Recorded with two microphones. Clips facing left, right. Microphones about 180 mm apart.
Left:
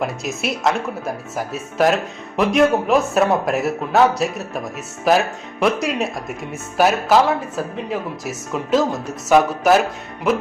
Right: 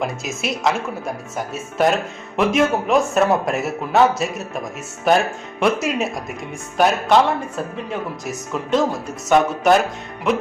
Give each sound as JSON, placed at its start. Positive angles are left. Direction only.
{"t": 0.0, "sound": "speech", "side_deg": 0}